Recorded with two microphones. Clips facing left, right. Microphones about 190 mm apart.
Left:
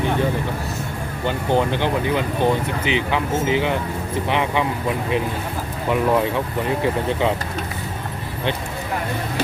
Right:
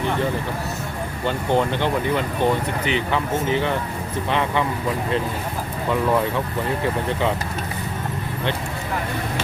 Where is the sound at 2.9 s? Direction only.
15° left (ahead or behind).